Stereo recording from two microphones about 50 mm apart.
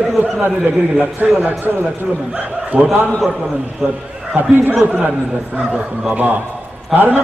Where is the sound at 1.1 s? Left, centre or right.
Right.